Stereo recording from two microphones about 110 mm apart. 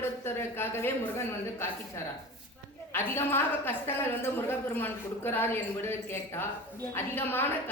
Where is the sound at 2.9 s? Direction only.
20° left (ahead or behind).